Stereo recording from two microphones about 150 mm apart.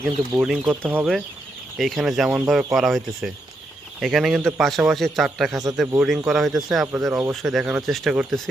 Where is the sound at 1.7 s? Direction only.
Centre (ahead or behind).